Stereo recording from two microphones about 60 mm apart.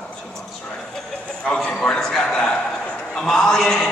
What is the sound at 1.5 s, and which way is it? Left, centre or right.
A man's voice, centre.